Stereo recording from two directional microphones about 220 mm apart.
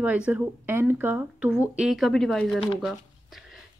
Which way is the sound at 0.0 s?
5° right (ahead or behind).